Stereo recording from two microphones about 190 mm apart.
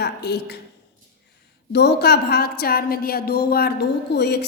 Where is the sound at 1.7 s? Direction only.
60° left (ahead or behind).